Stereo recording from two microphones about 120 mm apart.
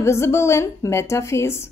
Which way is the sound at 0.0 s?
20° left (ahead or behind).